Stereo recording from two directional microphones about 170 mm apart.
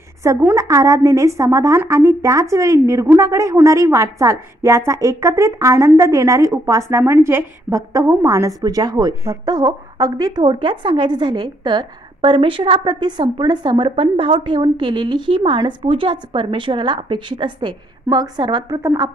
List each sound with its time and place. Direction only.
0.2 s a woman's voice: 15° right (ahead or behind)